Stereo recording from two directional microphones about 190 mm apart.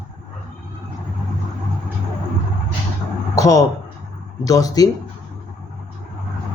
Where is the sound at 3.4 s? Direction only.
20° left (ahead or behind).